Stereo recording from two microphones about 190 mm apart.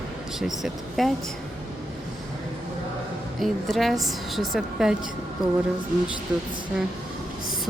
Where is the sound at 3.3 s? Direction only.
Centre (ahead or behind).